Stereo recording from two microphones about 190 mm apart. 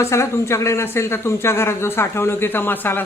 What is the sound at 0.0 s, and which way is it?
Speech, 15° left (ahead or behind).